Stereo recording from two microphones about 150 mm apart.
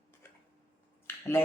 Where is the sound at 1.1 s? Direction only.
15° left (ahead or behind).